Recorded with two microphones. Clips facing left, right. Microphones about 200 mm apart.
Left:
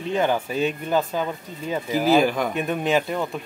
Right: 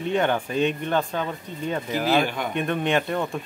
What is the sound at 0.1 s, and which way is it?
Speech, 5° left (ahead or behind).